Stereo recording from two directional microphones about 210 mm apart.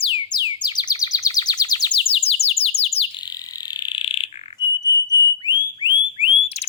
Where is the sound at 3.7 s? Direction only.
20° left (ahead or behind).